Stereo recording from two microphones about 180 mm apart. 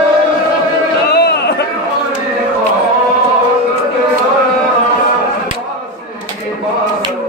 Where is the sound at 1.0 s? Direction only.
65° left (ahead or behind).